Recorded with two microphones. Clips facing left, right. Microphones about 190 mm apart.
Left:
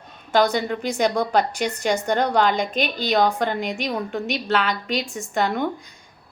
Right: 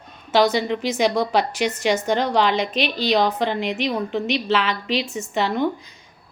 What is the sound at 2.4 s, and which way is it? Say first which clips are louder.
Speech: right 1 dB; 50° left (ahead or behind).